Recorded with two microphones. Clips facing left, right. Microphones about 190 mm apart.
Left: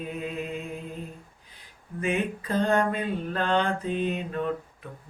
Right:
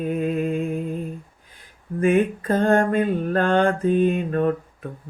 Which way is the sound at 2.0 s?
50° right (ahead or behind).